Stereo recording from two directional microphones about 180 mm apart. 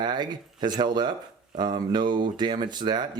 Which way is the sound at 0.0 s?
25° right (ahead or behind).